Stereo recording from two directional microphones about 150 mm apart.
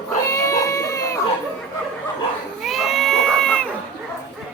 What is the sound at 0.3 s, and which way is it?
Baby cry, 20° left (ahead or behind).